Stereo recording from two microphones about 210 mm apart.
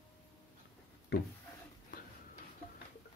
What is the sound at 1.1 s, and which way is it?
Speech, 55° left (ahead or behind).